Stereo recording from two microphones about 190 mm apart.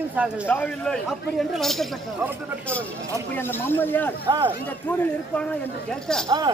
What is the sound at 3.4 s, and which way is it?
Speech, 10° left (ahead or behind).